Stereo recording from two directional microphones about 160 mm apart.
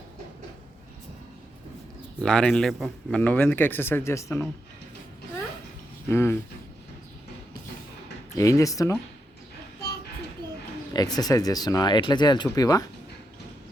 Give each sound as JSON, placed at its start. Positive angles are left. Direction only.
{"t": 2.2, "sound": "a man's voice", "side_deg": 5}
{"t": 6.1, "sound": "speech", "side_deg": 15}
{"t": 8.4, "sound": "speech", "side_deg": 20}
{"t": 10.9, "sound": "speech", "side_deg": 25}